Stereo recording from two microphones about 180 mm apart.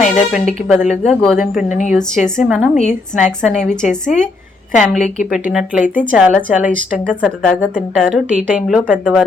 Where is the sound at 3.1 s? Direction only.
5° left (ahead or behind).